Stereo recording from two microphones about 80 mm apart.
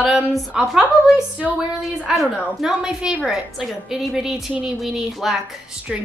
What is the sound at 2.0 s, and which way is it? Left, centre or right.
A woman's voice, centre.